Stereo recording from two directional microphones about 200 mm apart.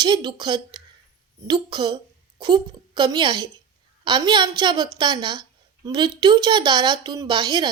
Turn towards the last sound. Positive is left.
turn(degrees=-20)  # may be behind; listen again after turning